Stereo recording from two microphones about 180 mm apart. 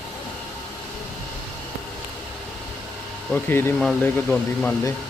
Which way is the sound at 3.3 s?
10° left (ahead or behind).